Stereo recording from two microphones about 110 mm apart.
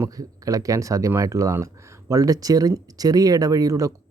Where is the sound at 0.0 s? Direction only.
30° right (ahead or behind).